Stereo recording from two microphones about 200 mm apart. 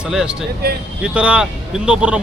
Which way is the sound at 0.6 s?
50° right (ahead or behind).